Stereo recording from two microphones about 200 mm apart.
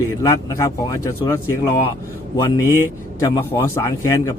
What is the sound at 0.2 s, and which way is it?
A man's voice, 15° left (ahead or behind).